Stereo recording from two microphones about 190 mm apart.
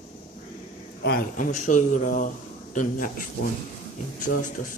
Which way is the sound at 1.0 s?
55° left (ahead or behind).